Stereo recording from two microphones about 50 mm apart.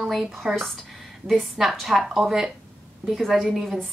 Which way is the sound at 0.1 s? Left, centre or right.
Centre.